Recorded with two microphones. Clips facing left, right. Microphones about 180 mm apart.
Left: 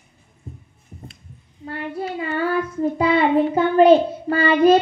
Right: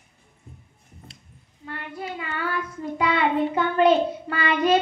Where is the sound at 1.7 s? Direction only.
35° left (ahead or behind).